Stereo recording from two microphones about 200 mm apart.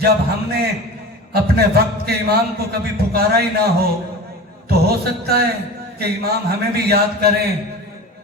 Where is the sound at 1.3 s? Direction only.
50° right (ahead or behind).